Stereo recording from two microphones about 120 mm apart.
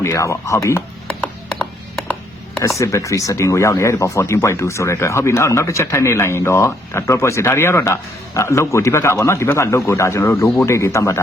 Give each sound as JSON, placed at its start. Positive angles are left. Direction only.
{"t": 0.0, "sound": "speech", "side_deg": 25}
{"t": 1.2, "sound": "music", "side_deg": 10}
{"t": 2.6, "sound": "speech", "side_deg": 25}